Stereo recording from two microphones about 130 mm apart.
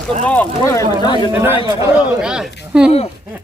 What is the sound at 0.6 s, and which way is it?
Speech, 25° left (ahead or behind).